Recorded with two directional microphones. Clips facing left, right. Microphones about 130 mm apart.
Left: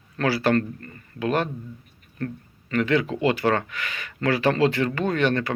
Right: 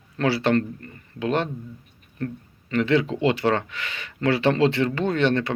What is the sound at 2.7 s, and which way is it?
Speech, 25° right (ahead or behind).